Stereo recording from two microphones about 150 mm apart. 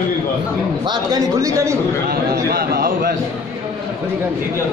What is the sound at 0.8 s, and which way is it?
Speech, 25° right (ahead or behind).